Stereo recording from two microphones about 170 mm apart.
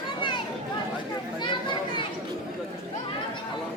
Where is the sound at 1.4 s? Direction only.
30° left (ahead or behind).